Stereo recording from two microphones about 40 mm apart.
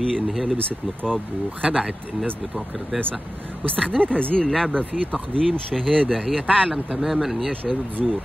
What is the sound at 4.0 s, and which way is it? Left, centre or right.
Speech, right.